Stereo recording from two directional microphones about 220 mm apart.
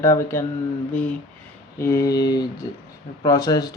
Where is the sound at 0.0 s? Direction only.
15° left (ahead or behind).